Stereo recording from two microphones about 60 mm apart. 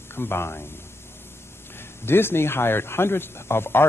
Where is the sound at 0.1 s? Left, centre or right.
Left.